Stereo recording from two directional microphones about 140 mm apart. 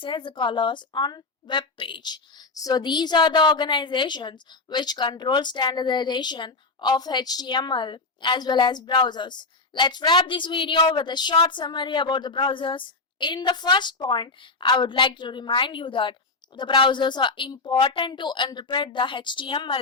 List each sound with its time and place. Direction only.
0.0 s a woman's voice: 35° left (ahead or behind)